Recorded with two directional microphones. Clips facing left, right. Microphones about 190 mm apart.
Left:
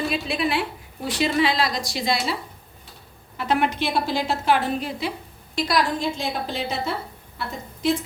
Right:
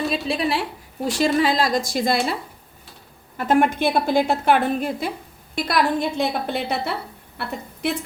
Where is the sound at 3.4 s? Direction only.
50° right (ahead or behind).